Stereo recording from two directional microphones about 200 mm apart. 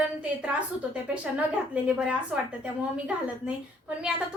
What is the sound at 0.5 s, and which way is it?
Speech, 5° right (ahead or behind).